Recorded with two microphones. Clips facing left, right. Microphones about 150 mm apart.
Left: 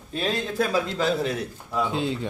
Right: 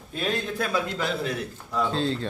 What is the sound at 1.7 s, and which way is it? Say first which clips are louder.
Speech: even; 15° left (ahead or behind).